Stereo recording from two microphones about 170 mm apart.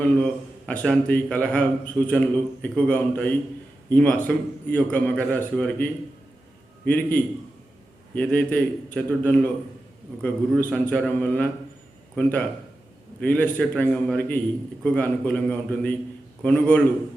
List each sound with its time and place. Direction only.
0.0 s a man's voice: 5° left (ahead or behind)
10.8 s a man's voice: 10° left (ahead or behind)